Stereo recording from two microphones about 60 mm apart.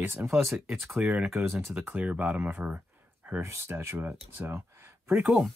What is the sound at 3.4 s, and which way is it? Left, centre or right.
Speech, right.